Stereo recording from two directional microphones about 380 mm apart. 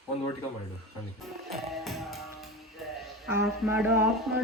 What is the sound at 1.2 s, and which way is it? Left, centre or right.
Music, centre.